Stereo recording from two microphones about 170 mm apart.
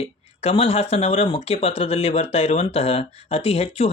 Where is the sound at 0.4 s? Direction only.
35° left (ahead or behind).